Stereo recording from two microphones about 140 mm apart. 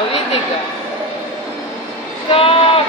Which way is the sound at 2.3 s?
40° left (ahead or behind).